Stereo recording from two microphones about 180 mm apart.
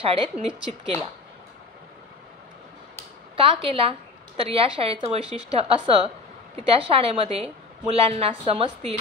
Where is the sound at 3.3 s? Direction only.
30° right (ahead or behind).